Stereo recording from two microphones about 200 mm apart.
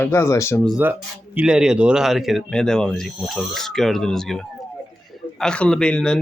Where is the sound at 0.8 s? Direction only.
10° right (ahead or behind).